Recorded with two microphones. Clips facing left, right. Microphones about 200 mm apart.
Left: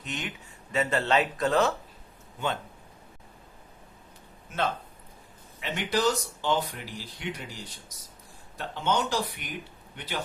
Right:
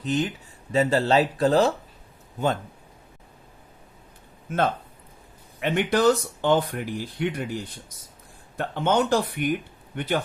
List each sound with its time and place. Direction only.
0.0 s speech: 35° right (ahead or behind)
4.4 s a man's voice: 50° right (ahead or behind)